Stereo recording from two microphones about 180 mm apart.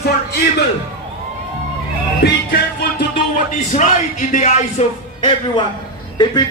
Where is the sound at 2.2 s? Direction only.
60° left (ahead or behind).